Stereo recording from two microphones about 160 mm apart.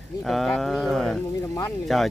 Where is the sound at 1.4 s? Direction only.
20° left (ahead or behind).